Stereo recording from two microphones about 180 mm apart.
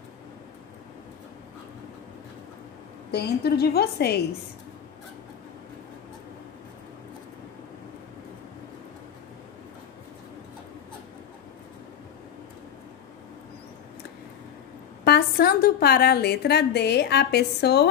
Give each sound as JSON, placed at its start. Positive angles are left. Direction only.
{"t": 3.1, "sound": "a woman's voice", "side_deg": 60}
{"t": 15.0, "sound": "a woman's voice", "side_deg": 60}